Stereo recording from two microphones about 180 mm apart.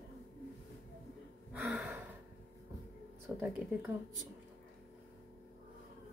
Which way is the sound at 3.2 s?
5° right (ahead or behind).